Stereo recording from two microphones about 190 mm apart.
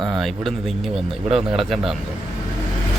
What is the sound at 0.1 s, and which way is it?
Speech, centre (ahead or behind).